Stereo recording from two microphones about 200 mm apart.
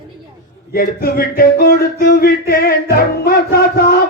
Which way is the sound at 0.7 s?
50° left (ahead or behind).